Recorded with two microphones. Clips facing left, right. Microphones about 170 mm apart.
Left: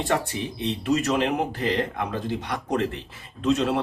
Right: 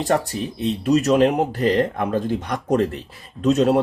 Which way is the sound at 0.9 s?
40° right (ahead or behind).